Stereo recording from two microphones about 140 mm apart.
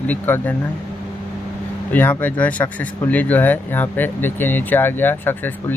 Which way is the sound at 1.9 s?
15° left (ahead or behind).